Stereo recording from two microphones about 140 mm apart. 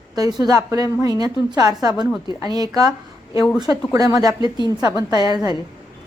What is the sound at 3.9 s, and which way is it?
A woman's voice, 25° right (ahead or behind).